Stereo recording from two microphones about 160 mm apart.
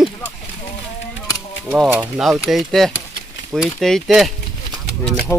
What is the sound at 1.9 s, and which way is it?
Speech, 10° right (ahead or behind).